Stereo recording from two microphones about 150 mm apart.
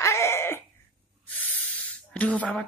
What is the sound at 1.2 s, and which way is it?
Spray, 10° left (ahead or behind).